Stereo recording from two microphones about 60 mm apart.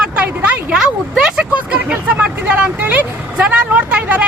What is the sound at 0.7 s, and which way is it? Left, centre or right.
Speech, centre.